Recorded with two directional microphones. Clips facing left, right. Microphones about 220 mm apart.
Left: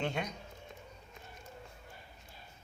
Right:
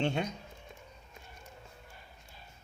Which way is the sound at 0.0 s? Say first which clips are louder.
Right 4 dB; 25° right (ahead or behind).